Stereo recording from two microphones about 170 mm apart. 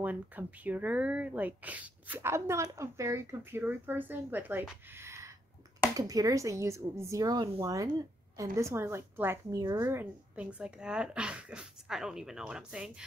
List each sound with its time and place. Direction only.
0.0 s a woman's voice: 10° right (ahead or behind)